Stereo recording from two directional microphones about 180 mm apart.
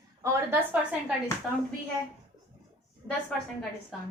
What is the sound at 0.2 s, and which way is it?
Speech, 10° right (ahead or behind).